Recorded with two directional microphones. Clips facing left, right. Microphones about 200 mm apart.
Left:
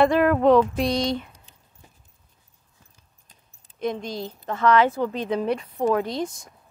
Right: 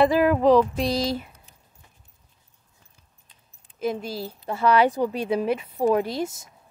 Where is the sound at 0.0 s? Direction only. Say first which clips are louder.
Even; centre (ahead or behind).